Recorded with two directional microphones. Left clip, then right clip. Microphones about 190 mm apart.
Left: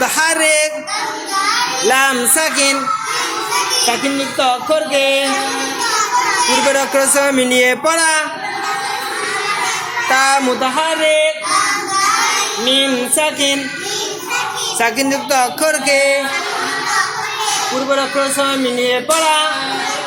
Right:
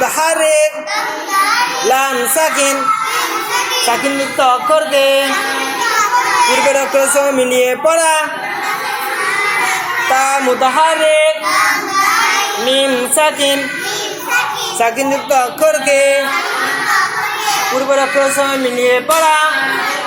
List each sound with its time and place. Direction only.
0.0 s a sound: 45° left (ahead or behind)
1.9 s speech: 45° left (ahead or behind)
3.8 s music: 40° left (ahead or behind)
6.7 s speech: 45° left (ahead or behind)
10.2 s a sound: 45° left (ahead or behind)
12.6 s music: 40° left (ahead or behind)
14.8 s speech: 45° left (ahead or behind)
17.9 s speech: 40° left (ahead or behind)